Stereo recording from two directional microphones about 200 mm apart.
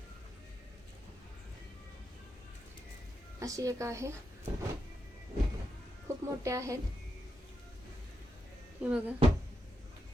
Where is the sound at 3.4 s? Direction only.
15° right (ahead or behind).